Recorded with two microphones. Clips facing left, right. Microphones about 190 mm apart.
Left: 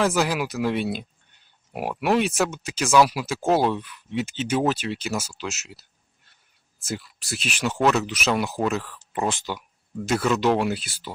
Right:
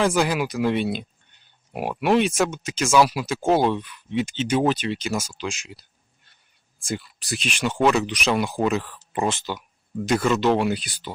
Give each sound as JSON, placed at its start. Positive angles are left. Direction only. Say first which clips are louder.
{"t": 0.0, "sound": "speech", "louder": "right 1 dB", "side_deg": 5}
{"t": 2.8, "sound": "speech", "louder": "even", "side_deg": -5}
{"t": 3.1, "sound": "speech", "louder": "right 1 dB", "side_deg": 5}